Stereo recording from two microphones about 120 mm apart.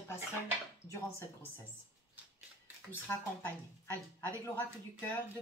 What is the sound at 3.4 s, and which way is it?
A woman's voice, 20° left (ahead or behind).